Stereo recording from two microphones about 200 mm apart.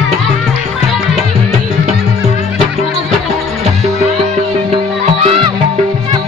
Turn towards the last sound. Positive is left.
turn(degrees=-30)  # may be behind; listen again after turning